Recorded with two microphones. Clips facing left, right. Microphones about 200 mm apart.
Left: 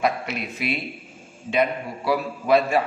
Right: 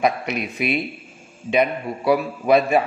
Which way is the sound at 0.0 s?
15° right (ahead or behind).